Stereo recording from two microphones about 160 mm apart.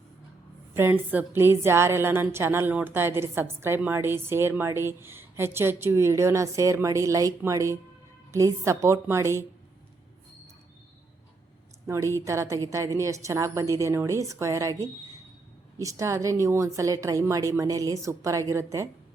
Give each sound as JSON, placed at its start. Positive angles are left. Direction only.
{"t": 0.7, "sound": "a woman's voice", "side_deg": -15}
{"t": 11.9, "sound": "a woman's voice", "side_deg": -20}